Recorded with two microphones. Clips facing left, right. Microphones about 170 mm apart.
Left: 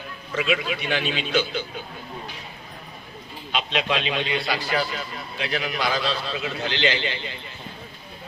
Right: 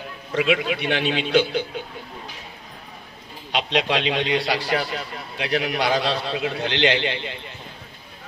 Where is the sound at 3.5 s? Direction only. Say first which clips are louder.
Right 3 dB; 70° right (ahead or behind).